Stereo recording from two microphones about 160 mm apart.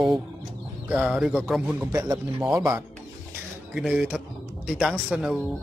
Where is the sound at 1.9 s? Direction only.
15° right (ahead or behind).